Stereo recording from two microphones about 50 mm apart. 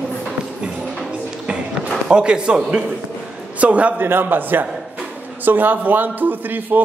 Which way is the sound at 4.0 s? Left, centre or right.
Right.